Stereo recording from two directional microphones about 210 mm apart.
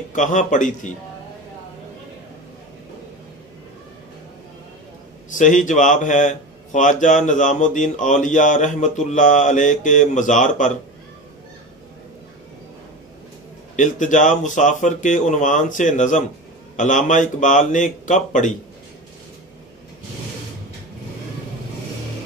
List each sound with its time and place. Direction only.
0.1 s a man's voice: 35° left (ahead or behind)
5.3 s a man's voice: 35° left (ahead or behind)
13.7 s a man's voice: 35° left (ahead or behind)